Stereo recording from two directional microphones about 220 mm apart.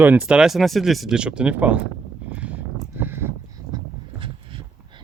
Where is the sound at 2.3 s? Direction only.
5° right (ahead or behind).